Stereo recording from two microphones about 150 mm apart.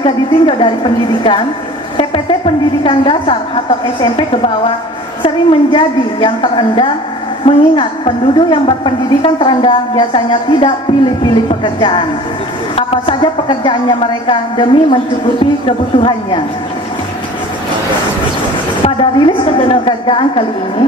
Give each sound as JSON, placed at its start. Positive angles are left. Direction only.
{"t": 0.0, "sound": "a woman's voice", "side_deg": 35}
{"t": 2.8, "sound": "a woman's voice", "side_deg": 35}
{"t": 5.2, "sound": "a woman's voice", "side_deg": 35}
{"t": 18.9, "sound": "a woman's voice", "side_deg": 30}